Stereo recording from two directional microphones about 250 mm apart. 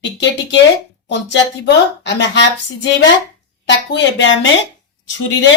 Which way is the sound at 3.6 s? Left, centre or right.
Left.